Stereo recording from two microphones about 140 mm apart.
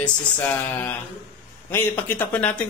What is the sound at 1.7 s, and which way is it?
Speech, 15° left (ahead or behind).